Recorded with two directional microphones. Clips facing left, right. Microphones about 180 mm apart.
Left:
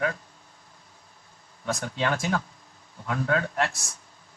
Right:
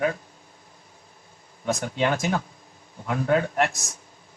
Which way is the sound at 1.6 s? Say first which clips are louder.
Right 4 dB; 20° right (ahead or behind).